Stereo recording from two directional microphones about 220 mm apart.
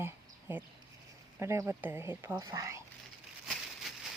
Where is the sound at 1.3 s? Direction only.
10° right (ahead or behind).